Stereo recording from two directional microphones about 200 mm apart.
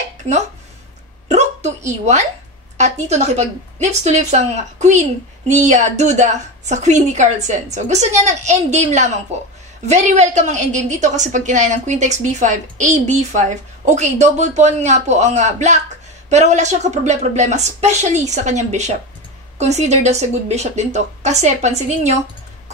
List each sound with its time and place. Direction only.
1.9 s a woman's voice: 35° right (ahead or behind)